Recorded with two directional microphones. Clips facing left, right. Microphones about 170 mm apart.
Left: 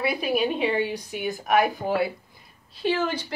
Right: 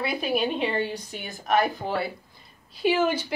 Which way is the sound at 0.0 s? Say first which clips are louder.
Left 2 dB; 5° left (ahead or behind).